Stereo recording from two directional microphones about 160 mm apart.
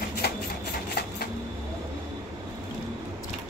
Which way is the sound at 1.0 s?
75° left (ahead or behind).